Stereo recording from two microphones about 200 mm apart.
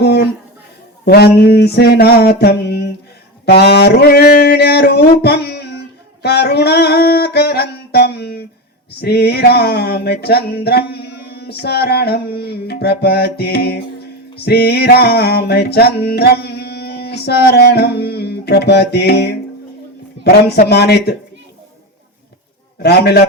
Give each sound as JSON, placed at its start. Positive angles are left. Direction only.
{"t": 0.0, "sound": "a sound", "side_deg": 55}
{"t": 1.0, "sound": "music", "side_deg": 50}
{"t": 20.2, "sound": "speech", "side_deg": 55}
{"t": 22.8, "sound": "music", "side_deg": 55}